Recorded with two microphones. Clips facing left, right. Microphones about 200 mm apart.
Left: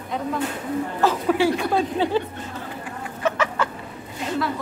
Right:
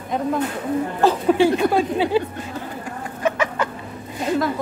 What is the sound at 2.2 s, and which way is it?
Speech, 10° right (ahead or behind).